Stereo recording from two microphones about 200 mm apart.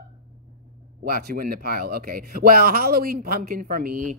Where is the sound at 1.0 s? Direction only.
50° right (ahead or behind).